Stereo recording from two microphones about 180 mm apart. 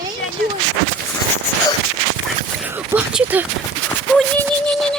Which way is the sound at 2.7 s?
10° right (ahead or behind).